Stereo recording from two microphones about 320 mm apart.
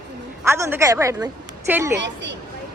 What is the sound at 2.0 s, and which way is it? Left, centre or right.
Speech, right.